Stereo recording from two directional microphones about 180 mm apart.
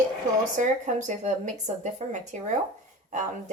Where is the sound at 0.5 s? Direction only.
45° right (ahead or behind).